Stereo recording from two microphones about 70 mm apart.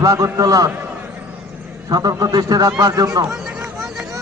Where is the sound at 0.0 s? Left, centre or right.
Right.